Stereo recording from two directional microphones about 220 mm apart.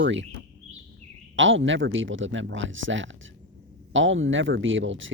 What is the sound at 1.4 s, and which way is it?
Speech, 60° right (ahead or behind).